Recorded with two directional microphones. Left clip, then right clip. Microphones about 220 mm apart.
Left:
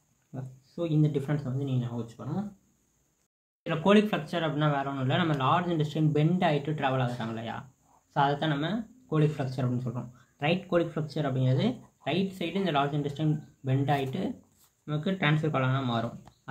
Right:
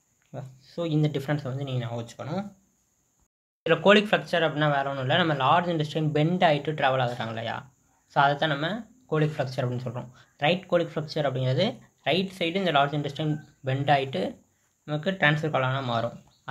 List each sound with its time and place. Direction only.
0.3 s speech: 20° right (ahead or behind)
3.6 s speech: 20° right (ahead or behind)